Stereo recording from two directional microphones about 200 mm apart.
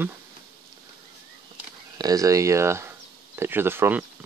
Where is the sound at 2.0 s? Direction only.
20° right (ahead or behind).